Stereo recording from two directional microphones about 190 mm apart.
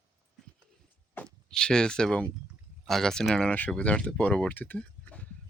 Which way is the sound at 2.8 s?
Centre (ahead or behind).